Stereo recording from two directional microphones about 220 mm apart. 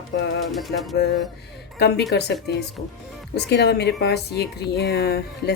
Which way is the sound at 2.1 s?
45° left (ahead or behind).